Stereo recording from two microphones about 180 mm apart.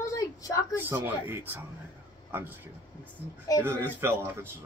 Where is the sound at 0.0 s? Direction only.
20° left (ahead or behind).